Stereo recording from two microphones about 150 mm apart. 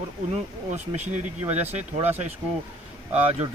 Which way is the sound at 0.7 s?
50° right (ahead or behind).